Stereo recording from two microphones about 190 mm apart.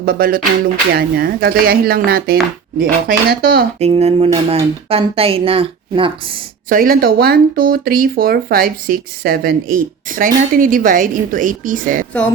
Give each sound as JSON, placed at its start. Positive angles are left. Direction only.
{"t": 0.0, "sound": "speech", "side_deg": -50}
{"t": 3.8, "sound": "speech", "side_deg": -35}
{"t": 6.7, "sound": "speech", "side_deg": -50}